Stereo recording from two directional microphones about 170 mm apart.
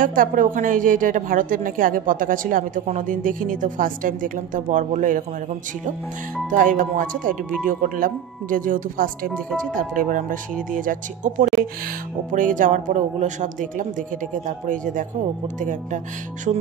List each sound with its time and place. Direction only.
0.0 s a woman's voice: 55° right (ahead or behind)
6.5 s a woman's voice: 50° right (ahead or behind)
16.5 s music: 40° right (ahead or behind)